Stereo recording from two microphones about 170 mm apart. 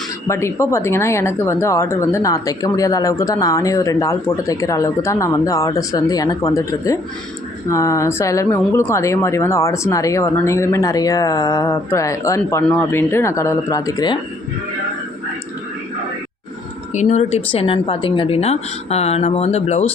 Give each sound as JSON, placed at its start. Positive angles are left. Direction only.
{"t": 0.3, "sound": "speech", "side_deg": 15}
{"t": 16.9, "sound": "a woman's voice", "side_deg": 45}